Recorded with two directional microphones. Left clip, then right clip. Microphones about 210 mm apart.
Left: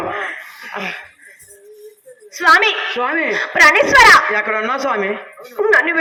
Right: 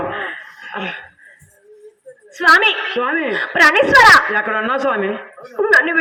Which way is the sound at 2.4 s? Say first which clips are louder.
Even; 45° right (ahead or behind).